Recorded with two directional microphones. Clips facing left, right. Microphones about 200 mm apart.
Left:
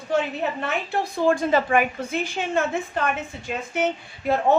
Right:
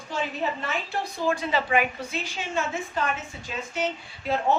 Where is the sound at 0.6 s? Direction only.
55° left (ahead or behind).